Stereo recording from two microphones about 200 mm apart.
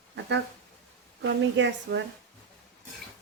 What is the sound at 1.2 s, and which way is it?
Speech, 60° right (ahead or behind).